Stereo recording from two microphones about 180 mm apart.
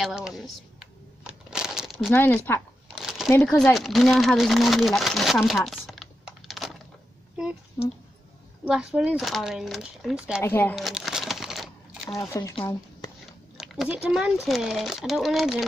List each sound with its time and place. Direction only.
0.0 s shuffling cards: 5° right (ahead or behind)
2.1 s speech: 10° left (ahead or behind)
2.9 s a sound: 5° right (ahead or behind)
3.3 s speech: 10° left (ahead or behind)
7.8 s speech: 15° left (ahead or behind)
8.6 s speech: 5° right (ahead or behind)
10.4 s speech: 10° left (ahead or behind)
10.8 s crumpling: centre (ahead or behind)
12.2 s speech: 20° left (ahead or behind)
13.6 s a sound: centre (ahead or behind)
14.0 s speech: 5° right (ahead or behind)